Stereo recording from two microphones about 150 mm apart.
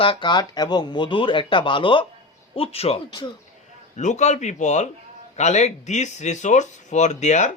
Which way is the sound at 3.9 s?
50° left (ahead or behind).